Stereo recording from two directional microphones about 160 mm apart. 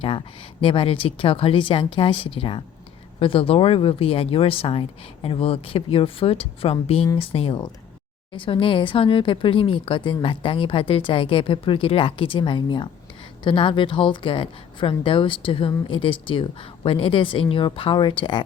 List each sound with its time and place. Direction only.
0.0 s a woman's voice: 35° left (ahead or behind)